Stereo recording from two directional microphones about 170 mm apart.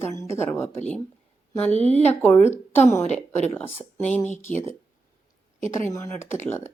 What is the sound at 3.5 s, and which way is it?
Speech, 10° left (ahead or behind).